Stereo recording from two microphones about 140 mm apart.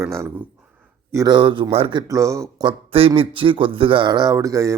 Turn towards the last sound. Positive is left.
turn(degrees=-25)  # may be behind; listen again after turning